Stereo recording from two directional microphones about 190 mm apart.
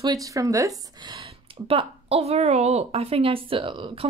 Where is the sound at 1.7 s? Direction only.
30° right (ahead or behind).